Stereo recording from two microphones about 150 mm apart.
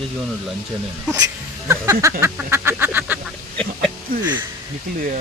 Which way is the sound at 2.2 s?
15° right (ahead or behind).